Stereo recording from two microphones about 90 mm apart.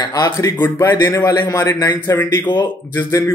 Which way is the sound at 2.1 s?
25° left (ahead or behind).